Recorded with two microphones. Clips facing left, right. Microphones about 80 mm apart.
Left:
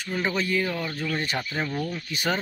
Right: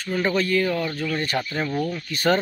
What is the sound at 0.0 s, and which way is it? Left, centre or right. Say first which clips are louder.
Speech: right 4 dB; centre.